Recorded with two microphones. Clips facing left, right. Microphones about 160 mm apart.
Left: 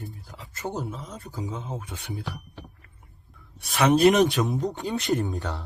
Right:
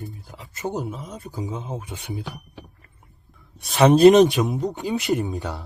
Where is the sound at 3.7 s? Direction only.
30° right (ahead or behind).